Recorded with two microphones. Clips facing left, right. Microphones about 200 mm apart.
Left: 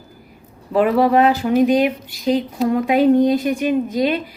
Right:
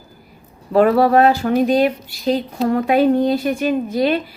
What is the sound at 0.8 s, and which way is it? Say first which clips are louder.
A woman's voice: right 2 dB; 15° left (ahead or behind).